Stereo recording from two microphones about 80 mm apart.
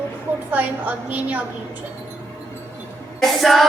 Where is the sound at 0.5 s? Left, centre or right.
Right.